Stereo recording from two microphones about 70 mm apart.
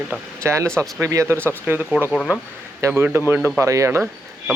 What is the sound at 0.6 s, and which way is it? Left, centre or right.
Speech, centre.